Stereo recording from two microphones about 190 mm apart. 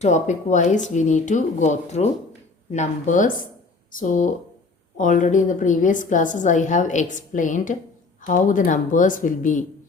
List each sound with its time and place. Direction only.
0.0 s a woman's voice: 40° left (ahead or behind)